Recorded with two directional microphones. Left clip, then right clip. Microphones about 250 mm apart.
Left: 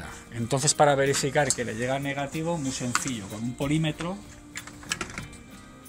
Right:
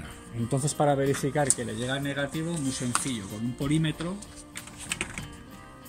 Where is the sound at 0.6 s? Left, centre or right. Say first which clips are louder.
Left 4 dB; left.